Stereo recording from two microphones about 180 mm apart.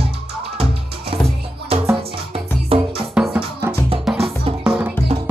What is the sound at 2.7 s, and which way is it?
Music, 30° right (ahead or behind).